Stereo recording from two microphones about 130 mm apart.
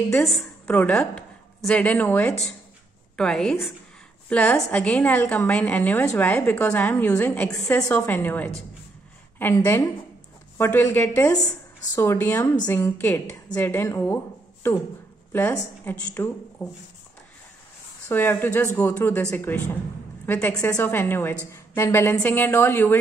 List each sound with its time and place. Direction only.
0.1 s a woman's voice: centre (ahead or behind)
0.7 s a woman's voice: 10° left (ahead or behind)
9.6 s a woman's voice: 20° left (ahead or behind)
15.8 s a woman's voice: 15° left (ahead or behind)
18.0 s a woman's voice: 15° left (ahead or behind)